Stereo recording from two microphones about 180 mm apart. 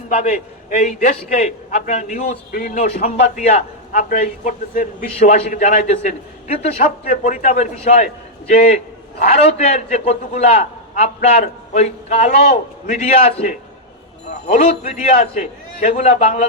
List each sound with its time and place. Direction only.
0.1 s a man's voice: 45° left (ahead or behind)